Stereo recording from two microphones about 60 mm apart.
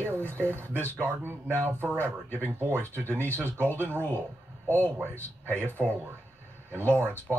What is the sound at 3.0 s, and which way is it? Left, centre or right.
Speech, left.